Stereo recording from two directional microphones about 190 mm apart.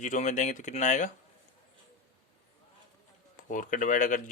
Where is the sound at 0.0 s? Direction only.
40° left (ahead or behind).